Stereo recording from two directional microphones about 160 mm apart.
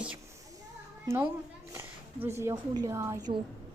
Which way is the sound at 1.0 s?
15° right (ahead or behind).